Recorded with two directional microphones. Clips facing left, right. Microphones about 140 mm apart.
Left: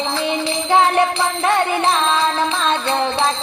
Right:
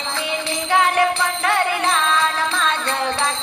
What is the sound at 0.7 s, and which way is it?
Music, 25° left (ahead or behind).